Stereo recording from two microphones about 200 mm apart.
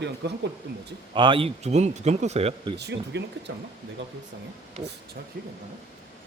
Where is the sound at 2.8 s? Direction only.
55° right (ahead or behind).